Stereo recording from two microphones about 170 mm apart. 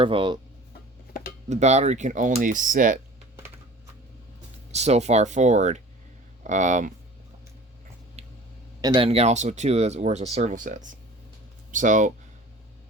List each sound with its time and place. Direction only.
0.0 s speech: 30° right (ahead or behind)
1.5 s speech: 40° right (ahead or behind)
4.7 s speech: 40° right (ahead or behind)
8.8 s speech: 30° right (ahead or behind); by 12.1 s 50° right (ahead or behind)